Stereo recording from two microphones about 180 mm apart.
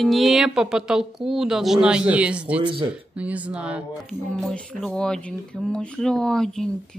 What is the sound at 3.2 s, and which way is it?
A woman's voice, 5° right (ahead or behind).